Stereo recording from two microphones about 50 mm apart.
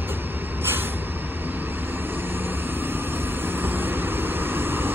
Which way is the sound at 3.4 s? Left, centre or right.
Right.